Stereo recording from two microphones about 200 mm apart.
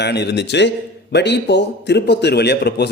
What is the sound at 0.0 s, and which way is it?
A man's voice, 55° left (ahead or behind).